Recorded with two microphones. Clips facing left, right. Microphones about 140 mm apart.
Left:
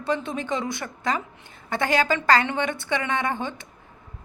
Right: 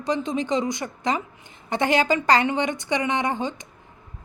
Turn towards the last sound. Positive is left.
turn(degrees=-15)  # may be behind; listen again after turning